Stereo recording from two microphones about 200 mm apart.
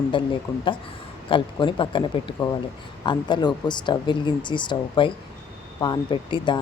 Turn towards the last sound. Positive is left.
turn(degrees=25)  # may be behind; listen again after turning